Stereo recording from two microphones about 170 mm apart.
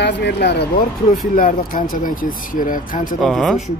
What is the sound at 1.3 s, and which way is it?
Speech, 55° left (ahead or behind).